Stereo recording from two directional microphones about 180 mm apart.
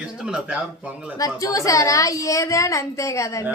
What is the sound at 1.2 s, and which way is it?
A woman's voice, 20° left (ahead or behind).